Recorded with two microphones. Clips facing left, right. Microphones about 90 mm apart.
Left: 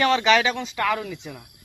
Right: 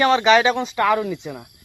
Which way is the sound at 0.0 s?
20° right (ahead or behind).